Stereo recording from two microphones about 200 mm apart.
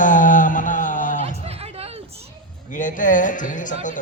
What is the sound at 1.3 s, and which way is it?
Chatter, 30° right (ahead or behind).